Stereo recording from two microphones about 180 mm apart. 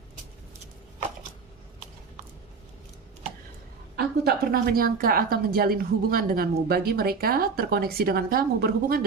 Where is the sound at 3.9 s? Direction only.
60° right (ahead or behind).